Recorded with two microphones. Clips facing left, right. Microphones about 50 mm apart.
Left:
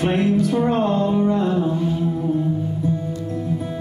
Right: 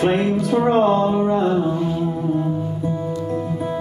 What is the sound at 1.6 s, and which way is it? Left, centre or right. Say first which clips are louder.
Mantra: right 1 dB; centre.